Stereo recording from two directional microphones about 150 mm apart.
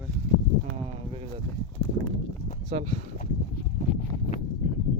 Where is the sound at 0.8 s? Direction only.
40° right (ahead or behind).